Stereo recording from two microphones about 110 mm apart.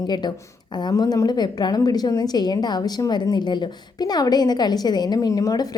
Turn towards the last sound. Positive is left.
turn(degrees=35)  # may be behind; listen again after turning